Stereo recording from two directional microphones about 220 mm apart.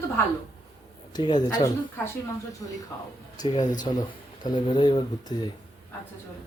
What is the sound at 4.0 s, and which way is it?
Speech, 20° left (ahead or behind).